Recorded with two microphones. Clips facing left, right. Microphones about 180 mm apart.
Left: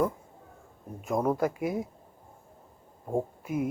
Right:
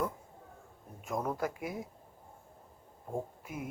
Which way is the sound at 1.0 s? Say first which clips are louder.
Left 7 dB; 55° left (ahead or behind).